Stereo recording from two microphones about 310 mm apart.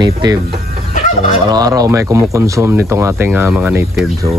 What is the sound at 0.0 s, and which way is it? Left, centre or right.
Speech, centre.